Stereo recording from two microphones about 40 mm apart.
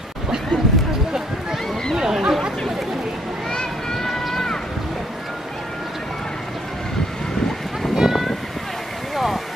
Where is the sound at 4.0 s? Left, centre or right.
Centre.